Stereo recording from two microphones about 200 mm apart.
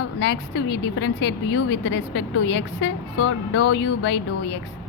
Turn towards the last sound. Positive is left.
turn(degrees=70)  # may be behind; listen again after turning